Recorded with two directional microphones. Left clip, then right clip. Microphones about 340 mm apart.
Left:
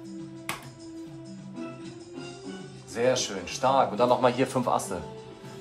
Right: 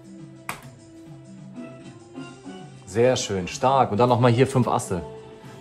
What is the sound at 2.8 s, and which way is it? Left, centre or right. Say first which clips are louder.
Speech: right 5 dB; right.